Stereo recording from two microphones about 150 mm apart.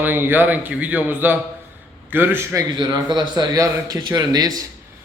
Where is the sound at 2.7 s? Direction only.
25° right (ahead or behind).